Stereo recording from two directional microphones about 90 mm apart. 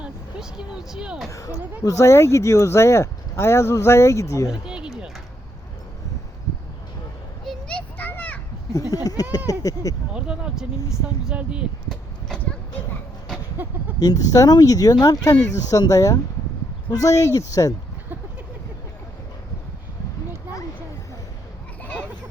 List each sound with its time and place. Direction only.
0.0 s speech: 5° right (ahead or behind)
1.8 s speech: 35° left (ahead or behind)
4.6 s a sound: 10° right (ahead or behind)
7.4 s children playing: 5° left (ahead or behind)
8.7 s speech: 40° left (ahead or behind)
10.2 s speech: 10° right (ahead or behind)
12.4 s a sound: 20° left (ahead or behind)
13.6 s speech: 20° right (ahead or behind)
14.0 s speech: 40° left (ahead or behind)